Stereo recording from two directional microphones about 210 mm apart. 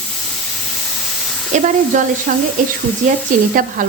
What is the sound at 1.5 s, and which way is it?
Frying, 35° right (ahead or behind).